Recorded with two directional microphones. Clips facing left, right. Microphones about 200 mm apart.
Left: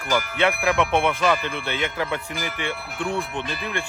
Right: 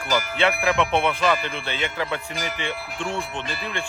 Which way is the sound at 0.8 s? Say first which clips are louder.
Left 1 dB; 15° left (ahead or behind).